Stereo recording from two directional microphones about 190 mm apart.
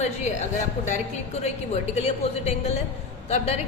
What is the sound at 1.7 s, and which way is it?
A woman's voice, 35° left (ahead or behind).